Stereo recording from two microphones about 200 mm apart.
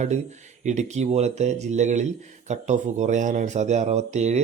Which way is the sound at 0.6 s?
35° right (ahead or behind).